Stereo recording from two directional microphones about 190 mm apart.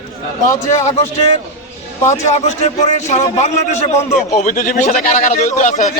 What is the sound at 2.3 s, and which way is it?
A man's voice, 35° left (ahead or behind).